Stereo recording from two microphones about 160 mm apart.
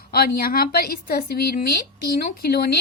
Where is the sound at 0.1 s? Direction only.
70° left (ahead or behind).